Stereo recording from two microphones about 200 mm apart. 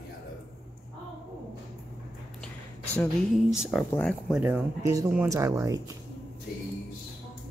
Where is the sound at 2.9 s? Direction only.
10° left (ahead or behind).